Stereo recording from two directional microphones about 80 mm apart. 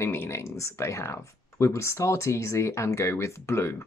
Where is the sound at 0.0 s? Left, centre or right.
Left.